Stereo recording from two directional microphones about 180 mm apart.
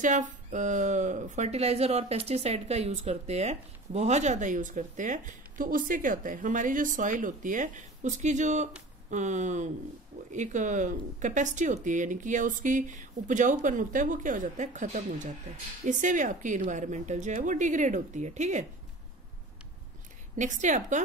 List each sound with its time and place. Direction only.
0.0 s speech: 45° right (ahead or behind)
20.3 s speech: 45° right (ahead or behind)